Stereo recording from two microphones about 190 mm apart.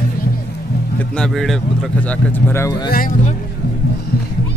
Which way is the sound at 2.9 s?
45° left (ahead or behind).